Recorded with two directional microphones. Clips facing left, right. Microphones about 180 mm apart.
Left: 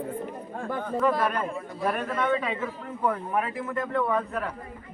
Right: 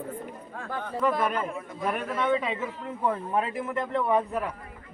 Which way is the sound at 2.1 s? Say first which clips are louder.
Even; 20° right (ahead or behind).